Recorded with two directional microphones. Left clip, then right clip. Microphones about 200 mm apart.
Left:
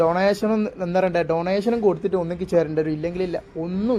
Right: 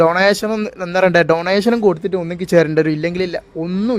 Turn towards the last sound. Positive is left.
turn(degrees=-55)  # may be behind; listen again after turning